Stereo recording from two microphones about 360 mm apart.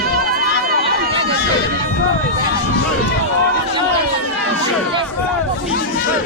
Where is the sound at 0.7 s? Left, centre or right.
Centre.